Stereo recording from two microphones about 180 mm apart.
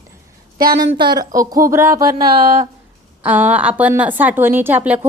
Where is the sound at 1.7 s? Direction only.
15° right (ahead or behind).